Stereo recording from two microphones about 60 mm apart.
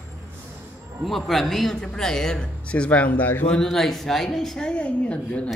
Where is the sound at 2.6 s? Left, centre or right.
Left.